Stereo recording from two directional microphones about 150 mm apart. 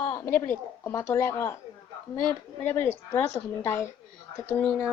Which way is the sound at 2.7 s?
15° left (ahead or behind).